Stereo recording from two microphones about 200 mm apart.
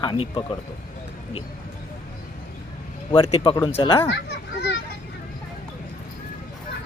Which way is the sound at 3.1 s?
30° left (ahead or behind).